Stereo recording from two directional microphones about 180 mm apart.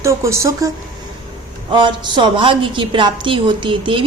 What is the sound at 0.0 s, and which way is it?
Speech, 15° right (ahead or behind).